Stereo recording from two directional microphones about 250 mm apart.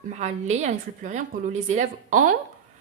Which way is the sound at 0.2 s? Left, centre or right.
Right.